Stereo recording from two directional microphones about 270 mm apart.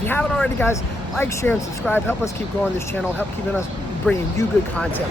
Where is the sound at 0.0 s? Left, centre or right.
Centre.